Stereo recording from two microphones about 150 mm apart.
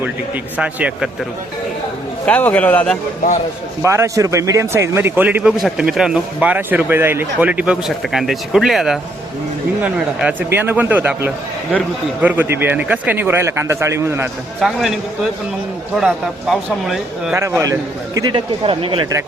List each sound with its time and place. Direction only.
0.5 s a man's voice: 10° right (ahead or behind)
2.2 s speech: 10° left (ahead or behind)
3.8 s a man's voice: 20° right (ahead or behind)
14.6 s speech: centre (ahead or behind)
16.0 s speech: centre (ahead or behind)
17.3 s a man's voice: 15° right (ahead or behind)
18.3 s speech: 35° right (ahead or behind)